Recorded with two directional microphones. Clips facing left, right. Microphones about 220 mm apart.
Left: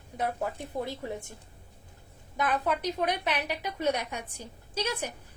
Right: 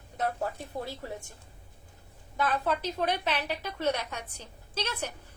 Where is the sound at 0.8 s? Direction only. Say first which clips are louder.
Left 4 dB; 20° left (ahead or behind).